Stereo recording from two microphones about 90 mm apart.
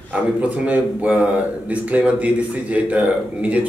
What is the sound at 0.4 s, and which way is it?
A man's voice, 20° right (ahead or behind).